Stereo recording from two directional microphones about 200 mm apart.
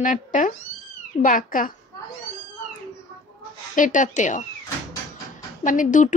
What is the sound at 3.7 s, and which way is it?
Speech, 40° left (ahead or behind).